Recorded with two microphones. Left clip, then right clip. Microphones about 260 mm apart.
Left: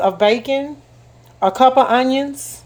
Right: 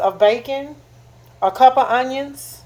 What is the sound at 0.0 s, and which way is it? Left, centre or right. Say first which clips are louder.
Speech: even; left.